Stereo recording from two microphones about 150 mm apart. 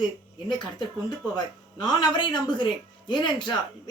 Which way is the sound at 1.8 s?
30° left (ahead or behind).